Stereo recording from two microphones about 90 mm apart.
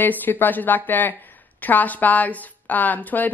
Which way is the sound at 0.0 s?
20° left (ahead or behind).